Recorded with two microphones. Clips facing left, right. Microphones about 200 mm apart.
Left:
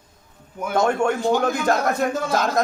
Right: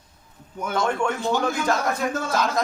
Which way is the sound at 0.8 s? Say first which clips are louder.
Left 5 dB; 45° left (ahead or behind).